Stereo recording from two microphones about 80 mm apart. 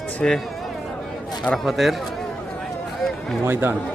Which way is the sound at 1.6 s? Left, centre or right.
Centre.